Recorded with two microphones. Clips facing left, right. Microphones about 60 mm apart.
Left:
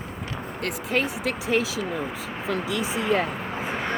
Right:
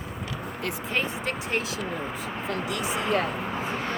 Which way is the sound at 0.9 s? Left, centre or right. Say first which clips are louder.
Left 4 dB; left.